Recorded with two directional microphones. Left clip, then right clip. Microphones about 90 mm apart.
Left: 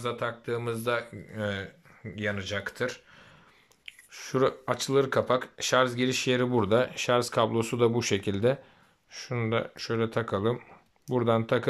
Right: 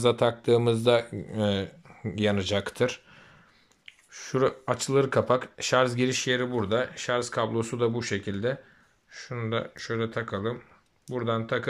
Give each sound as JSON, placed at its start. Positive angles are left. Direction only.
{"t": 0.0, "sound": "speech", "side_deg": -70}
{"t": 2.0, "sound": "speech", "side_deg": -50}
{"t": 2.7, "sound": "speech", "side_deg": -25}
{"t": 3.8, "sound": "speech", "side_deg": 10}
{"t": 6.3, "sound": "speech", "side_deg": 20}